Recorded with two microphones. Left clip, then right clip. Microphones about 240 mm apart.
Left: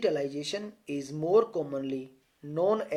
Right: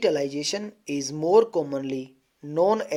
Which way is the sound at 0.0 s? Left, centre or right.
Right.